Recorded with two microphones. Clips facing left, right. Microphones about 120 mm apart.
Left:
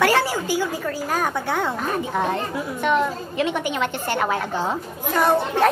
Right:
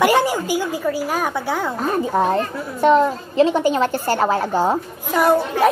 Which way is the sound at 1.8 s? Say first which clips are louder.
Right 5 dB; 35° right (ahead or behind).